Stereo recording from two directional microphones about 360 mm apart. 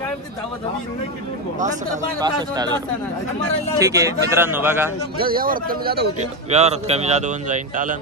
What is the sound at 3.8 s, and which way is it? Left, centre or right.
A man's voice, centre.